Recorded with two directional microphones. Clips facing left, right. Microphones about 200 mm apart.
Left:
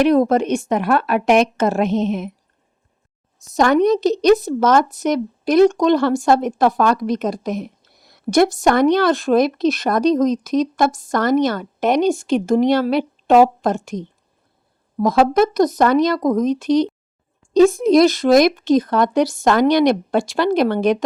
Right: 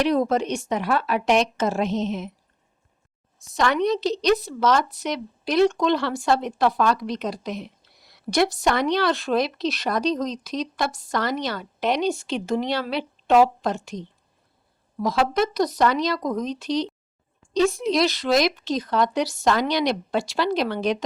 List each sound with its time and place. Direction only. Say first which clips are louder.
0.0 s speech: left 6 dB; 55° left (ahead or behind)
3.4 s a woman's voice: left 7 dB; 45° left (ahead or behind)